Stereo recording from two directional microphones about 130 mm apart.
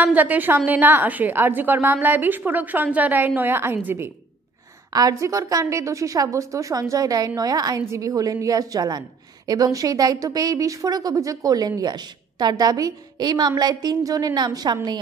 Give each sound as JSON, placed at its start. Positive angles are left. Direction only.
{"t": 0.0, "sound": "a woman's voice", "side_deg": -10}
{"t": 4.9, "sound": "a woman's voice", "side_deg": -25}